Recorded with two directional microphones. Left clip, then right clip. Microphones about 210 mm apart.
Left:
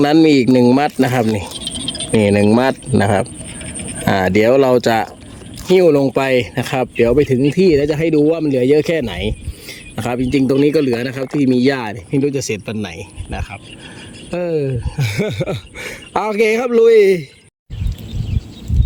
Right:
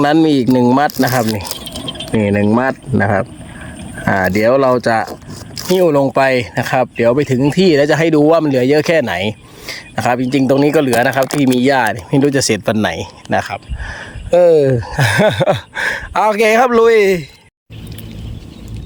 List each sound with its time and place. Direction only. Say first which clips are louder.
0.0 s speech: even; centre (ahead or behind)
1.2 s speech: even; 20° left (ahead or behind)
5.7 s speech: even; centre (ahead or behind); by 13.1 s 15° right (ahead or behind)
14.3 s speech: right 11 dB; 20° right (ahead or behind)